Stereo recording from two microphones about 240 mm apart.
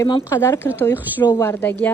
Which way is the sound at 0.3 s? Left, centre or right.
Centre.